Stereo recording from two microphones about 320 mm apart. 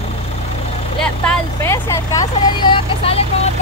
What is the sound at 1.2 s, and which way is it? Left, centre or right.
Speech, centre.